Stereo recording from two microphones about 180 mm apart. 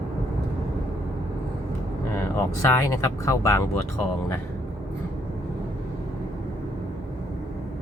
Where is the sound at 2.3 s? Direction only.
15° left (ahead or behind).